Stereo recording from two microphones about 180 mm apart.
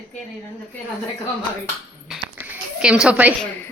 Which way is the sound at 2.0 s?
5° right (ahead or behind).